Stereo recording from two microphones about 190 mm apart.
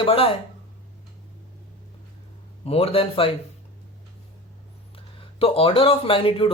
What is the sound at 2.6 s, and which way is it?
Speech, 30° left (ahead or behind).